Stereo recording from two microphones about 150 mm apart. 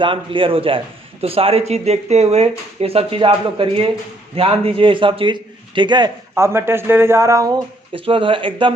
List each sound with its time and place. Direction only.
0.0 s speech: 35° right (ahead or behind)
6.3 s speech: 20° right (ahead or behind)
7.9 s speech: 35° right (ahead or behind)